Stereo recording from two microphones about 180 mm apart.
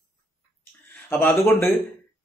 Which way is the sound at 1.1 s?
10° left (ahead or behind).